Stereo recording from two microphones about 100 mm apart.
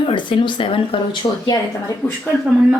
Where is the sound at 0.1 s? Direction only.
55° left (ahead or behind).